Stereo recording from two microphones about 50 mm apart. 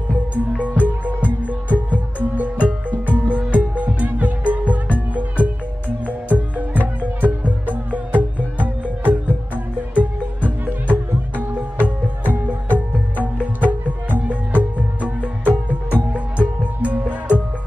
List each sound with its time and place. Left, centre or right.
0.6 s music: right